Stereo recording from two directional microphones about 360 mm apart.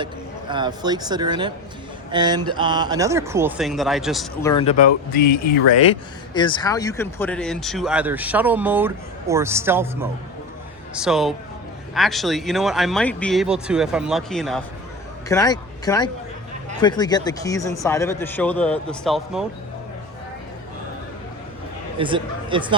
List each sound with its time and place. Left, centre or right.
0.0 s speech: centre
4.5 s speech: centre
6.3 s speech: centre
21.9 s speech: centre